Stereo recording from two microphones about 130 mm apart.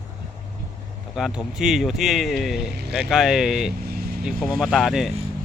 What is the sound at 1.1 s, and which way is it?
Speech, 5° right (ahead or behind).